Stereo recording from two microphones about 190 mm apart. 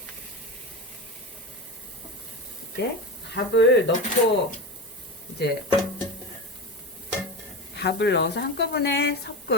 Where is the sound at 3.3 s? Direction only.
70° left (ahead or behind).